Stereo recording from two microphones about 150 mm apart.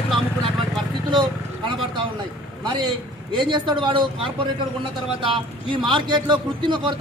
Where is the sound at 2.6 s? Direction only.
30° right (ahead or behind).